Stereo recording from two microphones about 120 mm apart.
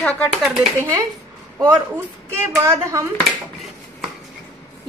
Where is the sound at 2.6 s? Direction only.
25° right (ahead or behind).